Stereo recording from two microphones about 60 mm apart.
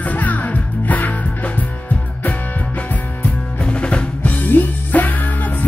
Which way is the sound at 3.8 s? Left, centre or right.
Left.